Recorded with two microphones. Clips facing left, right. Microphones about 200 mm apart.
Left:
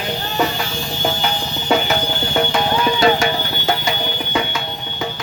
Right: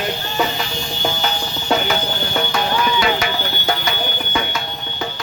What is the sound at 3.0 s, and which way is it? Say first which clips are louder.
Music: left 4 dB; 40° left (ahead or behind).